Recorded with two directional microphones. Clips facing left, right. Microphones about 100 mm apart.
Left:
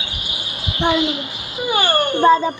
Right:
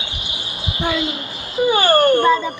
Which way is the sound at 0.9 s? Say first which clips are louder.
Left 3 dB; 35° right (ahead or behind).